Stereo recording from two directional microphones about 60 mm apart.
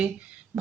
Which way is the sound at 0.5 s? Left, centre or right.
Centre.